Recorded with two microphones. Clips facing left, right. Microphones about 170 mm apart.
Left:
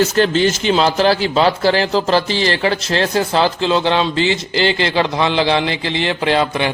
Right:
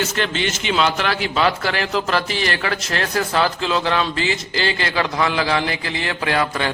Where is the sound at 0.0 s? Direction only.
35° left (ahead or behind).